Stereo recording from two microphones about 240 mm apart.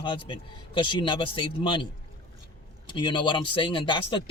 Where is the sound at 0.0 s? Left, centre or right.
Centre.